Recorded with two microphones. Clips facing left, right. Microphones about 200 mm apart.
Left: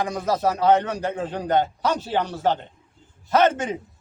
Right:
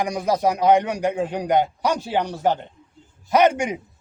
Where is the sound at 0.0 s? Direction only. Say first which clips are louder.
Right 2 dB; 15° right (ahead or behind).